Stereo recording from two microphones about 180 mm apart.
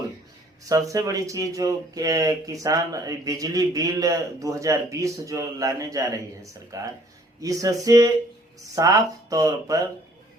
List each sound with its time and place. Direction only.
0.6 s speech: 20° right (ahead or behind)